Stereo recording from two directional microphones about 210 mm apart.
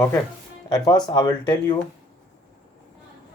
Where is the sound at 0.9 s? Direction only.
20° left (ahead or behind).